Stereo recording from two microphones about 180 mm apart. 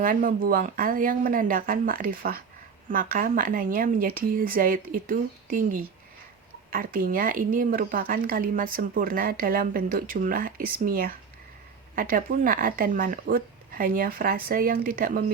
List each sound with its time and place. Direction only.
0.0 s speech: 50° right (ahead or behind)